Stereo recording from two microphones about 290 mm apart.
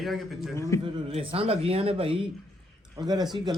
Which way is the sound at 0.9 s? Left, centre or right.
Centre.